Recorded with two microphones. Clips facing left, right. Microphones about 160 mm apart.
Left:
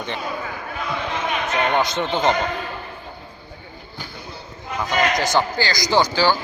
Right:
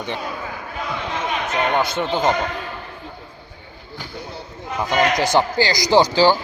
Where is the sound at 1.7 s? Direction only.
5° right (ahead or behind).